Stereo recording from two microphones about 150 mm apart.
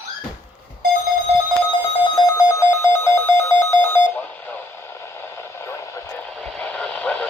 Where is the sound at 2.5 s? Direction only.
15° left (ahead or behind).